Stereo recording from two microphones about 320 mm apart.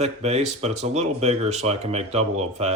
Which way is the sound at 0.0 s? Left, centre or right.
Right.